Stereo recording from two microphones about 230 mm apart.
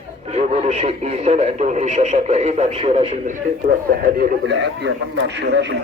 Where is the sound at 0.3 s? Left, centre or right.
Right.